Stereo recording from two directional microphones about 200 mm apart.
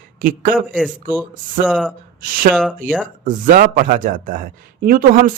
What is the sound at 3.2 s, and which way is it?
Speech, 40° right (ahead or behind).